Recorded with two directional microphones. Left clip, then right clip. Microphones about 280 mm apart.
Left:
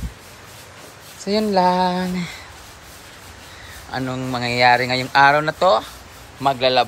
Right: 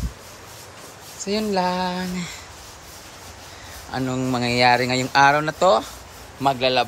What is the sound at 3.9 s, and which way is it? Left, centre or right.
A man's voice, centre.